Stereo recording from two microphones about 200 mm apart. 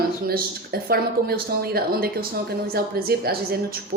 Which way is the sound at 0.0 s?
50° right (ahead or behind).